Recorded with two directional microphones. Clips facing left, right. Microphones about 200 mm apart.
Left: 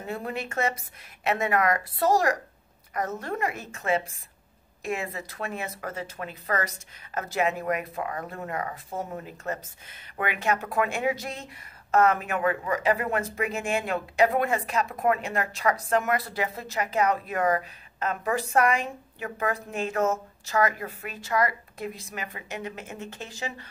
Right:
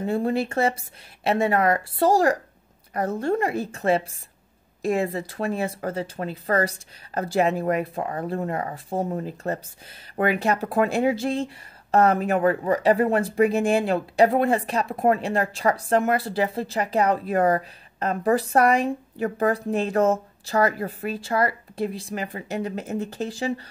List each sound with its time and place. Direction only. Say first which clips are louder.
0.0 s speech: right 9 dB; 30° right (ahead or behind)